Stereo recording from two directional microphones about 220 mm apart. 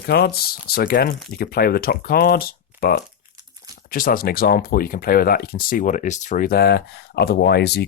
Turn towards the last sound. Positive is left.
turn(degrees=50)  # may be behind; listen again after turning